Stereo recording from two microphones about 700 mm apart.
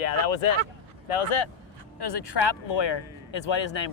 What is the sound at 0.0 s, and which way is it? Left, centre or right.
Vehicle, left.